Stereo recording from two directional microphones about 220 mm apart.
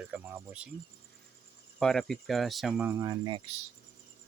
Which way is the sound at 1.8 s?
Centre (ahead or behind).